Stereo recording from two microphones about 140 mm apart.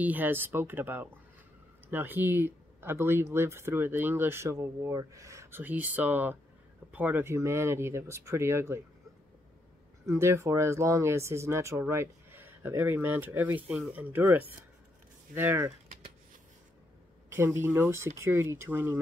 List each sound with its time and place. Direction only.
0.0 s speech: 10° right (ahead or behind)
10.0 s speech: 20° right (ahead or behind)
17.3 s speech: 15° right (ahead or behind)